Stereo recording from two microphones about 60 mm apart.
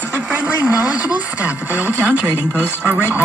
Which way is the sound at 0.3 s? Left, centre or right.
Right.